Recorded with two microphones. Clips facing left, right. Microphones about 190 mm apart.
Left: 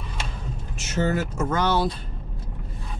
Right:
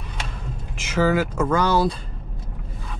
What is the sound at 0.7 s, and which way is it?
Speech, 90° right.